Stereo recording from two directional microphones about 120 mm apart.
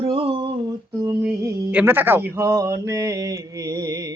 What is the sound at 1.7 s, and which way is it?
Mantra, 15° right (ahead or behind).